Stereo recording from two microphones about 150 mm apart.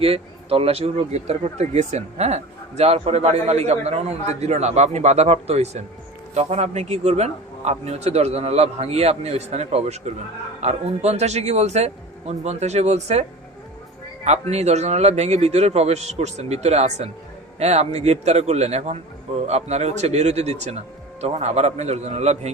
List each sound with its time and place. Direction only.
0.0 s a man's voice: 40° right (ahead or behind)
14.3 s a man's voice: 45° right (ahead or behind)